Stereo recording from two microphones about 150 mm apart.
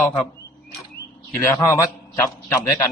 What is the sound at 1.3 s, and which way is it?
A man's voice, 20° left (ahead or behind).